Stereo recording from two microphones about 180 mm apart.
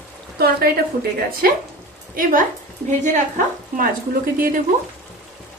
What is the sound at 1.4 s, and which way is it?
A woman's voice, 55° right (ahead or behind).